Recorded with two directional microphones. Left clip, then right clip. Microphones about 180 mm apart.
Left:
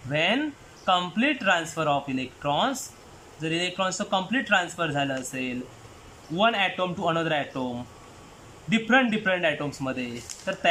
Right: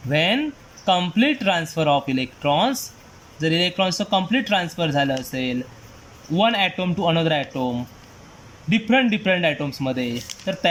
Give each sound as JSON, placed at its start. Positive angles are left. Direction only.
{"t": 0.1, "sound": "speech", "side_deg": -15}
{"t": 8.7, "sound": "speech", "side_deg": -15}